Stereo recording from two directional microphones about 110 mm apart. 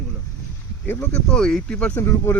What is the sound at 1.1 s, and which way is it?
Speech, 5° left (ahead or behind).